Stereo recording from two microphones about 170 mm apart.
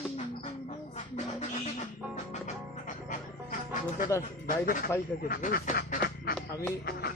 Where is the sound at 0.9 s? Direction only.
40° left (ahead or behind).